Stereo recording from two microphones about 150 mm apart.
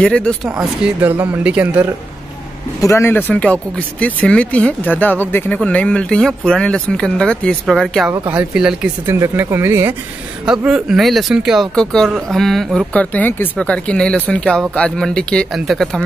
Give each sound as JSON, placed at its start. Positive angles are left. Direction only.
{"t": 0.0, "sound": "speech", "side_deg": 5}
{"t": 0.5, "sound": "speech", "side_deg": -5}
{"t": 2.8, "sound": "speech", "side_deg": 20}
{"t": 9.0, "sound": "speech", "side_deg": -15}
{"t": 10.4, "sound": "speech", "side_deg": -5}